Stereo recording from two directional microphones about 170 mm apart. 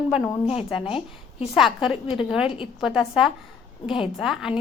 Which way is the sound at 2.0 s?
35° left (ahead or behind).